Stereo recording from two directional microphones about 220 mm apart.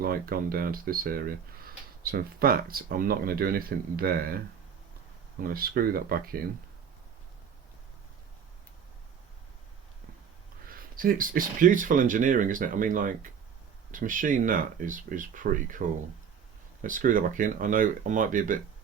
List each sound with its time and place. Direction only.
0.0 s speech: 40° right (ahead or behind)
5.4 s speech: 40° right (ahead or behind)
10.7 s speech: 40° right (ahead or behind)
16.8 s speech: 35° right (ahead or behind)